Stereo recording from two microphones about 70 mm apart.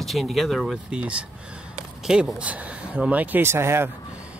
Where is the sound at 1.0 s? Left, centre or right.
Centre.